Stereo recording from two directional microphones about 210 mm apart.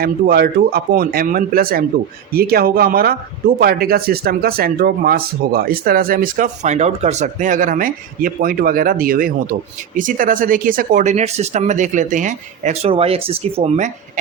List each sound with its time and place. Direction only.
0.0 s speech: 45° right (ahead or behind)